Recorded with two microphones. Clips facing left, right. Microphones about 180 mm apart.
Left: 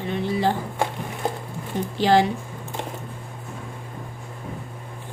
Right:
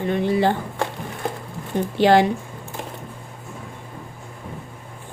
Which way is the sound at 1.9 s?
60° right (ahead or behind).